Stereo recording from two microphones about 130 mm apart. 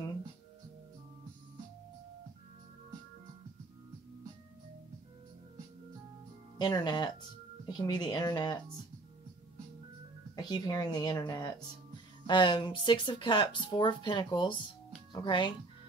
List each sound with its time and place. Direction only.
6.6 s speech: 35° left (ahead or behind)
10.3 s speech: 30° left (ahead or behind)